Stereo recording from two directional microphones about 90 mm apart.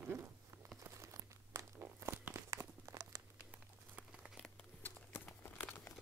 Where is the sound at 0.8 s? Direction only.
35° right (ahead or behind).